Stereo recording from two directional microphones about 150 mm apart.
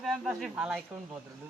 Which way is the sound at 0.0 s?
Centre (ahead or behind).